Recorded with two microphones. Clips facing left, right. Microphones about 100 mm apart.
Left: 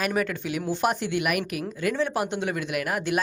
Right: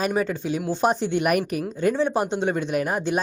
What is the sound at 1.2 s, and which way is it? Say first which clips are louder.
Speech: right 5 dB; 40° right (ahead or behind).